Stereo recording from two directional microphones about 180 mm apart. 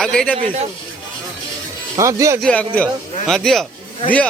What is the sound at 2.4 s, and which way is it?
Speech, 5° left (ahead or behind).